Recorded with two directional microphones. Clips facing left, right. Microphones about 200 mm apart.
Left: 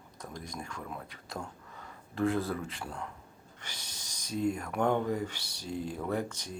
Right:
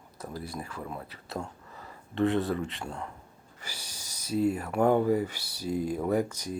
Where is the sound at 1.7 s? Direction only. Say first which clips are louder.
Right 6 dB; centre (ahead or behind).